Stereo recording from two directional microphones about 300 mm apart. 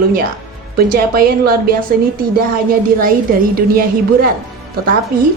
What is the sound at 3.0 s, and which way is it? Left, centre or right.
Speech, right.